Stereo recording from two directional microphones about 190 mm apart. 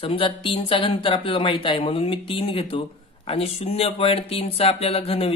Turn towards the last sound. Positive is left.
turn(degrees=30)  # may be behind; listen again after turning